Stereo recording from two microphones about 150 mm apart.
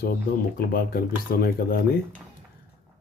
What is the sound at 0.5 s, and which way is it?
Speech, 80° left.